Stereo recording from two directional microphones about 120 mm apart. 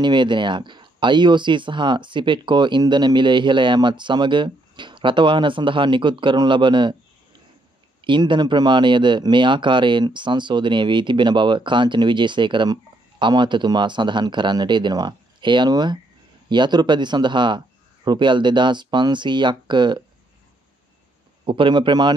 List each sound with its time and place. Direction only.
0.0 s speech: 40° right (ahead or behind)
8.0 s speech: 40° right (ahead or behind)
21.5 s speech: 40° right (ahead or behind)